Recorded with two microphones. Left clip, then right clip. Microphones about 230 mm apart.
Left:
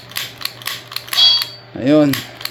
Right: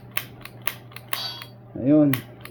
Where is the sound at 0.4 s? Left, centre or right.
Left.